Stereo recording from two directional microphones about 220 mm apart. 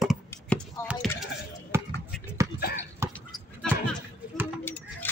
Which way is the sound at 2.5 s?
45° left (ahead or behind).